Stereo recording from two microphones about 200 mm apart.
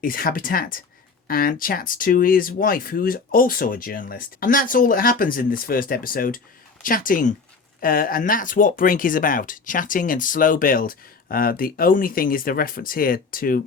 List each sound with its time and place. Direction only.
0.0 s speech: 45° left (ahead or behind)